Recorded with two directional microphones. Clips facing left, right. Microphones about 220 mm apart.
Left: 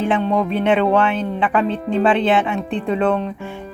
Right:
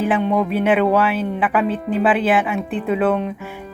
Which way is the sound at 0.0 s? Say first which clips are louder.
Even; 5° right (ahead or behind).